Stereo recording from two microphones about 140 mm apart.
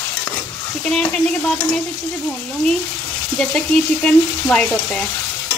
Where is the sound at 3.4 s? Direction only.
5° left (ahead or behind).